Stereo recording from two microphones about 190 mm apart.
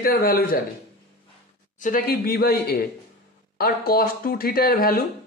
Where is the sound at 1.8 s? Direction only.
45° left (ahead or behind).